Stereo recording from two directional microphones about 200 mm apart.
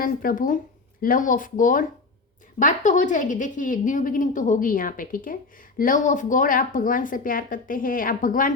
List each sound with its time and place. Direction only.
0.0 s a woman's voice: 45° left (ahead or behind)